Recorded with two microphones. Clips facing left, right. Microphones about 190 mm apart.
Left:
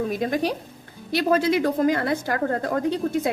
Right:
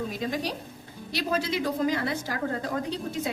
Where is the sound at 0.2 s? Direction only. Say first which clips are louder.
Left 6 dB; 55° left (ahead or behind).